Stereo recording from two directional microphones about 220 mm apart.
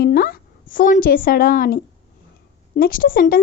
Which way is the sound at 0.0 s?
45° left (ahead or behind).